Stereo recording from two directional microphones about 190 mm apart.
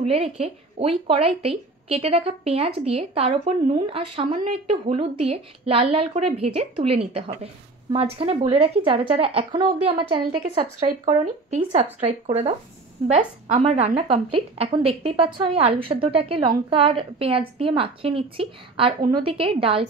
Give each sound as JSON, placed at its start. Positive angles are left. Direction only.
{"t": 0.0, "sound": "a woman's voice", "side_deg": -35}